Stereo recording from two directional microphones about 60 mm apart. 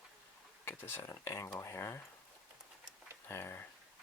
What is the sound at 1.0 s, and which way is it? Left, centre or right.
Speech, left.